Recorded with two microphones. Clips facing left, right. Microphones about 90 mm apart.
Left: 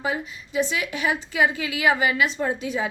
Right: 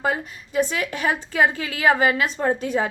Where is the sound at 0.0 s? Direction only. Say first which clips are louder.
Right 3 dB; 50° right (ahead or behind).